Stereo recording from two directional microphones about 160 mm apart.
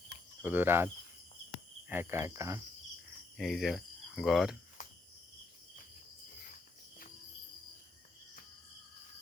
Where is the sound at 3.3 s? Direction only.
Centre (ahead or behind).